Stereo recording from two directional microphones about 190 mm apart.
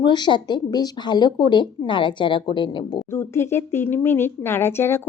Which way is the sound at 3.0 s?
15° left (ahead or behind).